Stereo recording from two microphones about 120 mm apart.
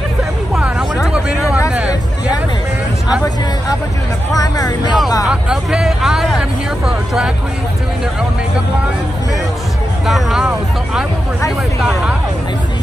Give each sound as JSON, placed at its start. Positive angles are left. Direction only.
{"t": 1.0, "sound": "vehicle", "side_deg": -5}
{"t": 4.3, "sound": "speech", "side_deg": 30}
{"t": 5.3, "sound": "speech", "side_deg": -5}
{"t": 10.0, "sound": "speech", "side_deg": 0}
{"t": 11.8, "sound": "speech", "side_deg": -5}